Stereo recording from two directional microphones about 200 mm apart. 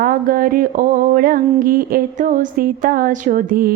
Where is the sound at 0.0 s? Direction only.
45° right (ahead or behind).